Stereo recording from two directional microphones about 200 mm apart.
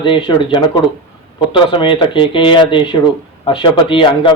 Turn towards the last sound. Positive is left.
turn(degrees=25)  # may be behind; listen again after turning